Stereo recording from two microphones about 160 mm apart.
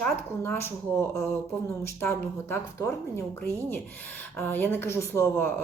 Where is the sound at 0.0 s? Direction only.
15° left (ahead or behind).